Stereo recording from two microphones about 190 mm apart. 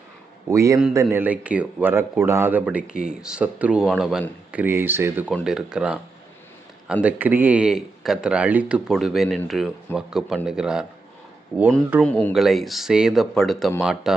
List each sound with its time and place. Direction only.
0.4 s a man's voice: 15° right (ahead or behind)
7.0 s a man's voice: 10° right (ahead or behind)
12.0 s a man's voice: 10° left (ahead or behind)